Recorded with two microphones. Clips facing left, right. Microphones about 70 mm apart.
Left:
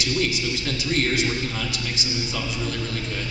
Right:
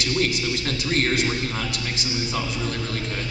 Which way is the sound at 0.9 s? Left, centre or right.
Right.